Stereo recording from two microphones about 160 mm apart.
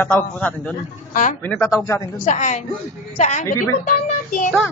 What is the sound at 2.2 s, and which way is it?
Speech, 50° left (ahead or behind).